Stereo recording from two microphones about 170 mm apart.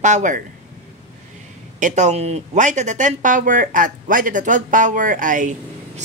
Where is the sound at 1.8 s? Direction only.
45° right (ahead or behind).